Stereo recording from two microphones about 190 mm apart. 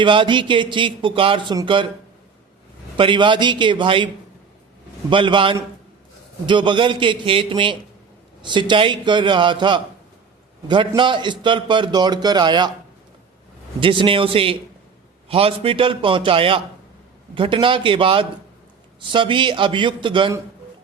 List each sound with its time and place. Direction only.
0.0 s a man's voice: 25° right (ahead or behind)
3.0 s a man's voice: 25° right (ahead or behind)
13.7 s a man's voice: 25° right (ahead or behind)